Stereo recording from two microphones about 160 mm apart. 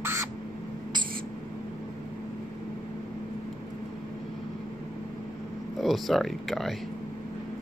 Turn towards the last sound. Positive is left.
turn(degrees=0)  # may be behind; listen again after turning